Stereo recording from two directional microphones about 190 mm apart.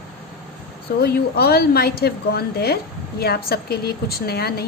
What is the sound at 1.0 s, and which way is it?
A woman's voice, 55° left (ahead or behind).